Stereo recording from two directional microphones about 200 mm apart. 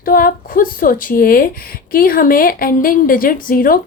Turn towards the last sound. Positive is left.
turn(degrees=45)  # may be behind; listen again after turning